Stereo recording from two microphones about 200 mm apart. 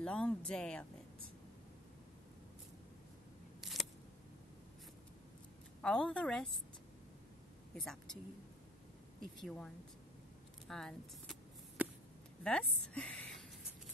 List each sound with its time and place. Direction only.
0.0 s speech: 5° left (ahead or behind)
3.6 s a sound: centre (ahead or behind)
5.8 s speech: 5° left (ahead or behind)
7.7 s speech: centre (ahead or behind)
9.4 s speech: 5° left (ahead or behind)
10.7 s a sound: centre (ahead or behind)
12.4 s a woman's voice: 5° left (ahead or behind)